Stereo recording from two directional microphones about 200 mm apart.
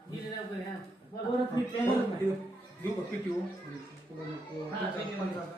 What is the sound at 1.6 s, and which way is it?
Speech, 20° left (ahead or behind).